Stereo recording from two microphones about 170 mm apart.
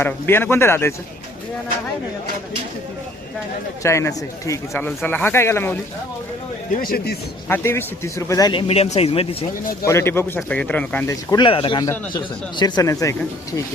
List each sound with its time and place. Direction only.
0.0 s speech: 15° left (ahead or behind)
3.8 s speech: 15° left (ahead or behind)
6.8 s speech: 65° left (ahead or behind)
7.4 s speech: 15° left (ahead or behind); by 9.5 s 35° left (ahead or behind)
9.8 s speech: 15° left (ahead or behind)